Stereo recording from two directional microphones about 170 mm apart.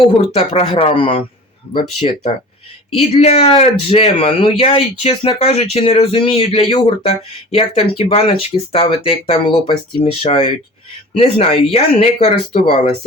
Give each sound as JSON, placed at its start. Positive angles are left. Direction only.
{"t": 0.3, "sound": "speech", "side_deg": 35}